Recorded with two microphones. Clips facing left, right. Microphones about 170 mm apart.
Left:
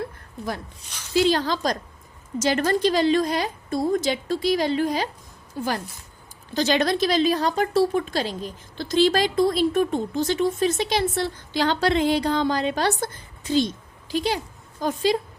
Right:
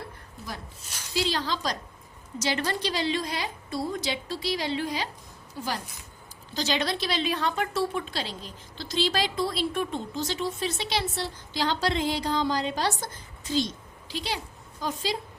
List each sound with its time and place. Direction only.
1.1 s a woman's voice: 50° left (ahead or behind)
14.1 s a woman's voice: 45° left (ahead or behind)